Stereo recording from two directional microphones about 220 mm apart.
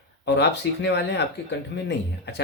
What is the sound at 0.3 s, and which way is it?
Speech, 50° left (ahead or behind).